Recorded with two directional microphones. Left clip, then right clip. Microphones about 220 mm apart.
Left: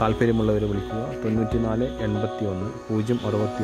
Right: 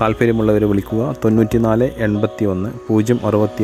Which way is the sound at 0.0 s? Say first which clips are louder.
Right 6 dB; 20° right (ahead or behind).